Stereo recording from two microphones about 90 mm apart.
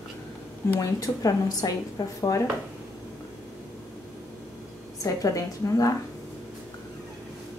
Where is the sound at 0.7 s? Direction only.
40° left (ahead or behind).